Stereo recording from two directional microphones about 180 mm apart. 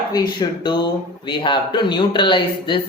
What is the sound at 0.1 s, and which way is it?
Speech, 25° left (ahead or behind).